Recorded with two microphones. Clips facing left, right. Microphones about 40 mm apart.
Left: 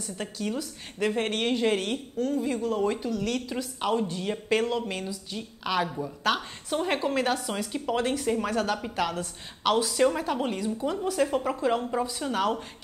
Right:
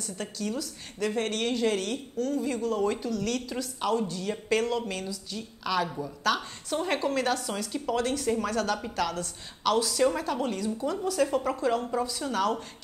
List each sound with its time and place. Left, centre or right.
0.0 s a woman's voice: centre
5.9 s a woman's voice: centre